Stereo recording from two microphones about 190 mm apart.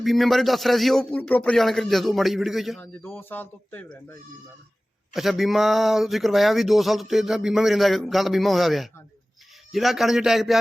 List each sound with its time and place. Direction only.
0.0 s speech: centre (ahead or behind)
2.8 s speech: 10° left (ahead or behind)
5.1 s speech: centre (ahead or behind)